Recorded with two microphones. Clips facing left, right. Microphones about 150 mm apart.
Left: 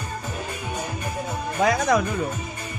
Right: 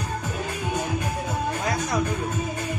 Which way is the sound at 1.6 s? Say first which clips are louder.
Left 10 dB; 90° left.